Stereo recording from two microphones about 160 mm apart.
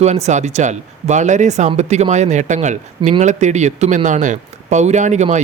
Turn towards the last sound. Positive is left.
turn(degrees=-45)  # may be behind; listen again after turning